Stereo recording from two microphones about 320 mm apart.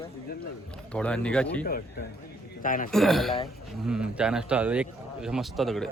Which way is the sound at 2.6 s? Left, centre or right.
Left.